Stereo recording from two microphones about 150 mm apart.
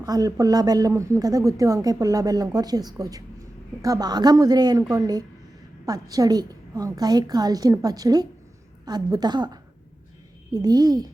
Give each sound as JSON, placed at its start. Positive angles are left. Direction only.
{"t": 0.0, "sound": "speech", "side_deg": -25}